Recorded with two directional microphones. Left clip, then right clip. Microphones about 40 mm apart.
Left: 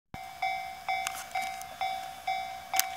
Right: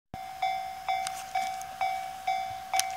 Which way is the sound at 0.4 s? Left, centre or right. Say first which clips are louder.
Right 2 dB; right.